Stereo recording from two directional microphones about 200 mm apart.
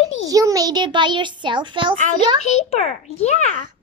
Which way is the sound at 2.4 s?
35° left (ahead or behind).